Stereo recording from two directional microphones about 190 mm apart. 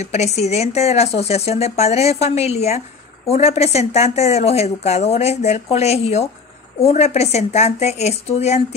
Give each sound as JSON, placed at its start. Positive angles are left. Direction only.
{"t": 0.0, "sound": "speech", "side_deg": 35}